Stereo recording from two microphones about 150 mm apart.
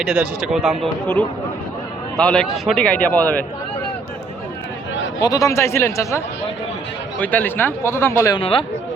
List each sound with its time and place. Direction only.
0.0 s a man's voice: 5° right (ahead or behind); by 3.4 s 10° left (ahead or behind)
5.2 s a man's voice: 25° left (ahead or behind)
8.4 s speech: 40° left (ahead or behind)